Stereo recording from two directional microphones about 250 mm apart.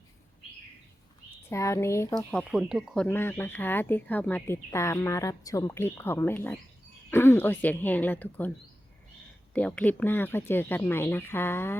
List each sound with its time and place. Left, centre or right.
1.5 s speech: centre
9.5 s speech: centre